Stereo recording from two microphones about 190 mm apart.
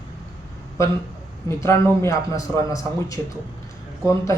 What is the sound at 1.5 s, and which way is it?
A man's voice, 15° left (ahead or behind).